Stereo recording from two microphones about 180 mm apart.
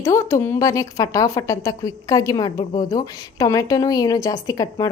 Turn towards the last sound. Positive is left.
turn(degrees=20)  # may be behind; listen again after turning